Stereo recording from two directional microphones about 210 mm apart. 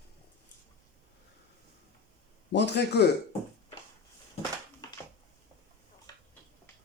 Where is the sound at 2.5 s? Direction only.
55° left (ahead or behind).